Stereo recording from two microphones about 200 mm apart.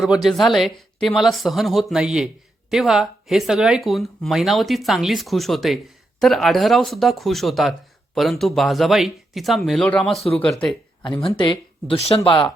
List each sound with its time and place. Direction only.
0.0 s speech: centre (ahead or behind)
11.2 s speech: 25° left (ahead or behind)